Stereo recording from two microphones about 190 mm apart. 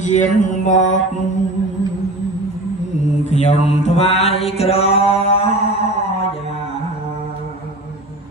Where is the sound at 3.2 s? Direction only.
40° left (ahead or behind).